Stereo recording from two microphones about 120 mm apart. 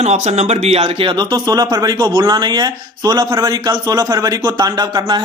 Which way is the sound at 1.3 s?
35° right (ahead or behind).